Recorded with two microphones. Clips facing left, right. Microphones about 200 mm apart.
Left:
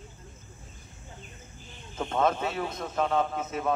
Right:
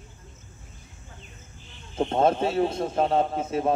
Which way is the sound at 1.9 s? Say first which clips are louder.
Right 5 dB; 30° right (ahead or behind).